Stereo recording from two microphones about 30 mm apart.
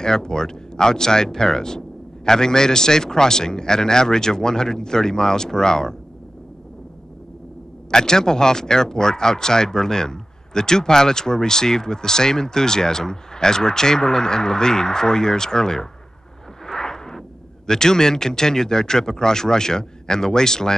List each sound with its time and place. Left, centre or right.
0.0 s speech: left
7.9 s speech: left
16.6 s a sound: left
17.6 s speech: left